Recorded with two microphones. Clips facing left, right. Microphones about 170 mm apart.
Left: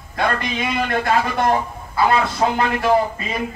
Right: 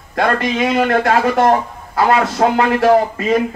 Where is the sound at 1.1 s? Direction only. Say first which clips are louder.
Right 3 dB; 45° right (ahead or behind).